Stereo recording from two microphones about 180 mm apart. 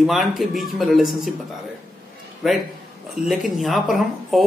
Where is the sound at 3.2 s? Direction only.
Centre (ahead or behind).